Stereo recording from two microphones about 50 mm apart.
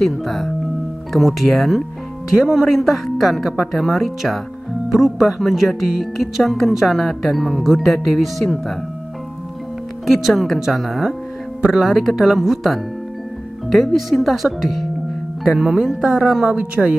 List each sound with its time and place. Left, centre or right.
0.0 s speech: centre
10.0 s speech: centre
11.9 s speech: centre
16.5 s speech: right